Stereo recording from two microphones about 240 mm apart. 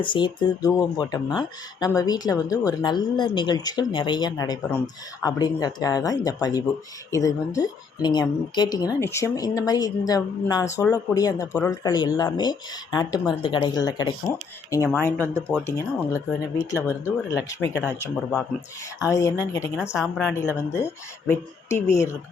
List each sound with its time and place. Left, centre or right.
0.0 s speech: centre
14.8 s a woman's voice: centre
19.1 s speech: centre
19.7 s a woman's voice: centre